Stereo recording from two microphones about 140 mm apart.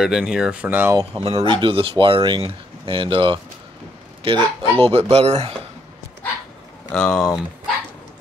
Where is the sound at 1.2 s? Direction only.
40° right (ahead or behind).